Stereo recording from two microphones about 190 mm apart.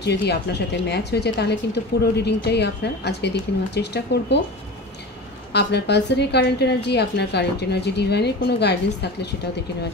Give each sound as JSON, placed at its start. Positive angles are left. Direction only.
{"t": 0.0, "sound": "a woman's voice", "side_deg": 60}
{"t": 5.5, "sound": "a woman's voice", "side_deg": 60}